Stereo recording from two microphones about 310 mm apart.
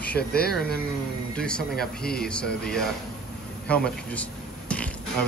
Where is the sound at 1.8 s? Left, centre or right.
Left.